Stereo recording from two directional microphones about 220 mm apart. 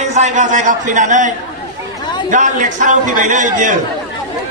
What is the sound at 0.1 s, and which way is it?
A man's voice, 35° right (ahead or behind).